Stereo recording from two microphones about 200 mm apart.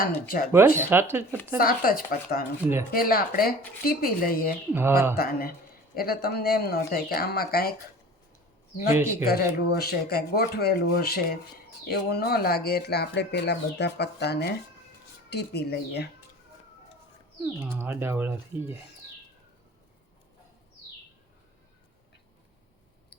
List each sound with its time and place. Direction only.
0.5 s speech: 10° right (ahead or behind)
1.5 s speech: 45° left (ahead or behind)
4.7 s speech: 10° right (ahead or behind)
5.1 s speech: 50° left (ahead or behind)
8.9 s speech: 10° right (ahead or behind)
9.2 s speech: 50° left (ahead or behind)
17.4 s speech: 10° right (ahead or behind)